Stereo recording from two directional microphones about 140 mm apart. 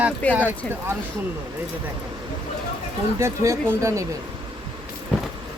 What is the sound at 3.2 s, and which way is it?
Speech, 20° right (ahead or behind).